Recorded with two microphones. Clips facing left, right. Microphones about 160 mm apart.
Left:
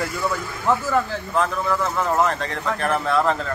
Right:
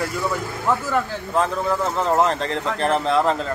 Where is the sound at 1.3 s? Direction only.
25° right (ahead or behind).